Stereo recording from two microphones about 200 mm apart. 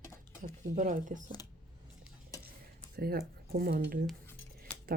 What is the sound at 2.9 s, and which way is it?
Speech, 50° right (ahead or behind).